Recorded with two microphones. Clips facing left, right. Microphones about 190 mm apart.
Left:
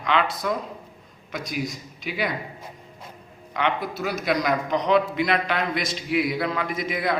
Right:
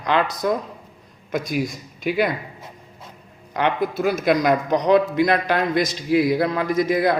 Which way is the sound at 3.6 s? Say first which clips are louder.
Right 4 dB; 50° right (ahead or behind).